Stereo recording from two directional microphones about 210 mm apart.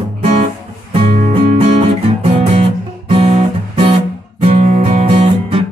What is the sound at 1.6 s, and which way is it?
Guitar, 30° right (ahead or behind).